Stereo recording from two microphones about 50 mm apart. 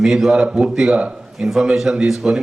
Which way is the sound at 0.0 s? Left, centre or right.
Centre.